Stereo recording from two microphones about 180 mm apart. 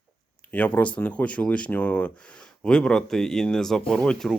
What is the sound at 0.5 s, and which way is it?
Speech, 10° left (ahead or behind).